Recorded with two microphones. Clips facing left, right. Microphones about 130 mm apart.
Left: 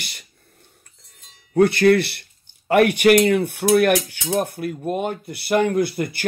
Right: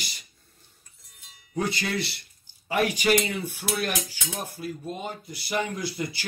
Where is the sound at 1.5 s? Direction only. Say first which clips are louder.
Left 14 dB; 60° left (ahead or behind).